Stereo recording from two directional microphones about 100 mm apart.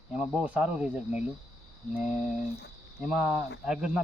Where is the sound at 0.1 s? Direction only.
10° right (ahead or behind).